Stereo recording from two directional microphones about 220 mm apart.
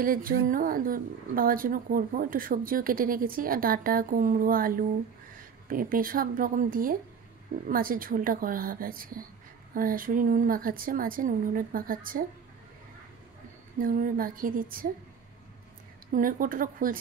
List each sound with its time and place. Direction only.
0.0 s a woman's voice: 40° right (ahead or behind)
13.7 s a woman's voice: 40° right (ahead or behind)
16.1 s a woman's voice: 40° right (ahead or behind)